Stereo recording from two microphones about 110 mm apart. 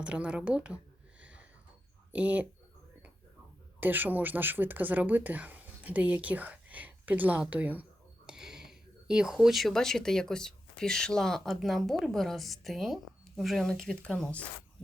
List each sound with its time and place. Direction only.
0.0 s speech: 10° right (ahead or behind)
1.2 s a sound: 10° right (ahead or behind)
2.1 s speech: 15° right (ahead or behind)
3.8 s speech: 15° right (ahead or behind); by 14.4 s 10° left (ahead or behind)